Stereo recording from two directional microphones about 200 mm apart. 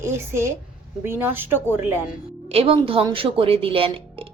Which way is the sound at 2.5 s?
30° right (ahead or behind).